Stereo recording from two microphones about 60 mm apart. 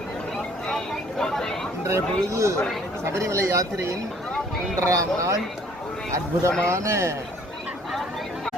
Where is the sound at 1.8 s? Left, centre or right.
Right.